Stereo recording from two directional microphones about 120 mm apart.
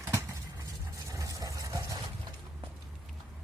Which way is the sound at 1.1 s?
25° right (ahead or behind).